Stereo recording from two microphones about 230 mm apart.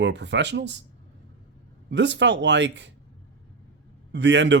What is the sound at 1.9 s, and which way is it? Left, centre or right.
Speech, right.